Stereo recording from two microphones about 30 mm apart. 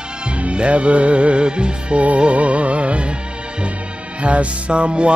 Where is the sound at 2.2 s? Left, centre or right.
Right.